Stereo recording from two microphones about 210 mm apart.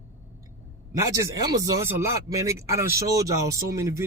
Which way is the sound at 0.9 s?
15° right (ahead or behind).